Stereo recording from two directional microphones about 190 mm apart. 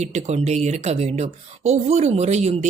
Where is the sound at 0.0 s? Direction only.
35° right (ahead or behind).